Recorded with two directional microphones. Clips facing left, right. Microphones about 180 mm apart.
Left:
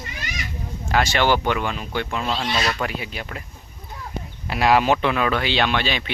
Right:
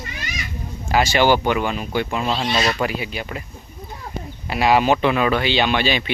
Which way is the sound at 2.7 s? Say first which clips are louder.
Right 4 dB; 5° right (ahead or behind).